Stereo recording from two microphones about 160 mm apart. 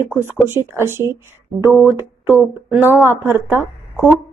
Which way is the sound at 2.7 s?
10° right (ahead or behind).